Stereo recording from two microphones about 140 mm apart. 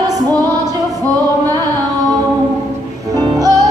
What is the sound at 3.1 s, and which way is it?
Music, 25° right (ahead or behind).